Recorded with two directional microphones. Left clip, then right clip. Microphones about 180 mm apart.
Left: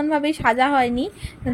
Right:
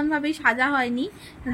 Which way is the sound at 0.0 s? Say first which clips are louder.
Left 3 dB; 15° left (ahead or behind).